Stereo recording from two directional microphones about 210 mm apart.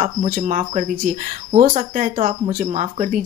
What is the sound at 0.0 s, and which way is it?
Speech, 35° right (ahead or behind).